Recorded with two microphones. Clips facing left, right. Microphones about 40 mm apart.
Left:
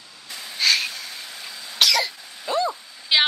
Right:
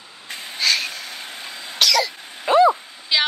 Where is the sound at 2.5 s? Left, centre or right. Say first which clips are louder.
Right 9 dB; right.